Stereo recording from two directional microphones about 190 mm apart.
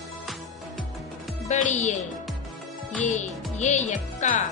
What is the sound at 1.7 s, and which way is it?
Speech, 40° left (ahead or behind).